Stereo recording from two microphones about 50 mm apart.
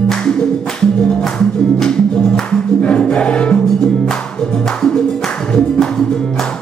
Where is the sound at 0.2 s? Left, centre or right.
Centre.